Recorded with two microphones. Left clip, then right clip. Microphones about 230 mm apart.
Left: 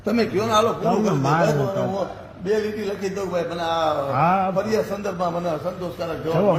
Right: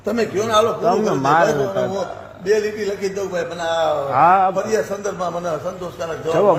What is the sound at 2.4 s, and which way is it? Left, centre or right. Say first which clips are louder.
A man's voice: right 4 dB; right.